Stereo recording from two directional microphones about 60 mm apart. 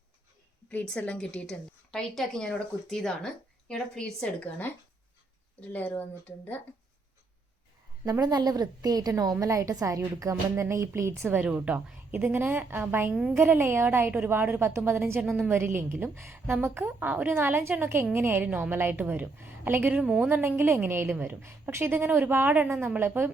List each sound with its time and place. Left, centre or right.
0.7 s a woman's voice: left
5.5 s speech: left
8.2 s a woman's voice: right
9.4 s a woman's voice: right
10.5 s speech: right
11.2 s a woman's voice: right
11.5 s a woman's voice: right
12.1 s a woman's voice: right
15.2 s a woman's voice: centre
15.4 s a woman's voice: right
19.9 s a woman's voice: centre
20.2 s a woman's voice: right